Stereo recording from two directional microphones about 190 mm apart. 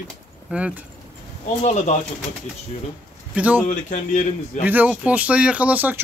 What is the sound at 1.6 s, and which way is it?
Speech, 40° left (ahead or behind).